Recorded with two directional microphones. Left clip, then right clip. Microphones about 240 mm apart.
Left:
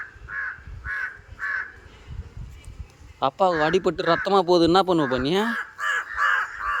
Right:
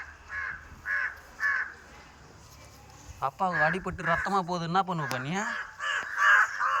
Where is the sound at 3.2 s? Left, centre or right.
Left.